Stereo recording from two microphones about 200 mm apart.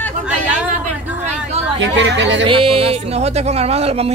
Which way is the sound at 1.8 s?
70° right (ahead or behind).